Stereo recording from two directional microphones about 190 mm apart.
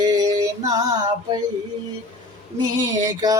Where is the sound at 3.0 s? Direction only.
20° right (ahead or behind).